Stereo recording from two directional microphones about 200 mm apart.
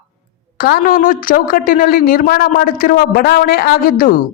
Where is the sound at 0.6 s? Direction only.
45° left (ahead or behind).